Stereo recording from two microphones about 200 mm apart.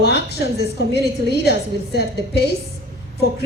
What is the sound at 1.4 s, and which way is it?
A woman's voice, 55° left (ahead or behind).